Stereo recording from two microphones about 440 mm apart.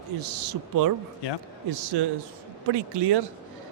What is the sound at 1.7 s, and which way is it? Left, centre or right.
Speech, right.